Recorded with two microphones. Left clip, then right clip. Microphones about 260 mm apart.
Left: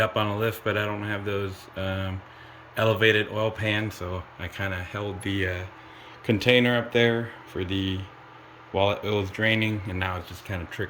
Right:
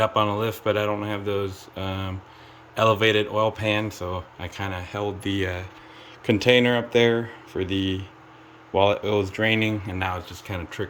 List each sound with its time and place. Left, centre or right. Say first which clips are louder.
0.0 s speech: right 3 dB; centre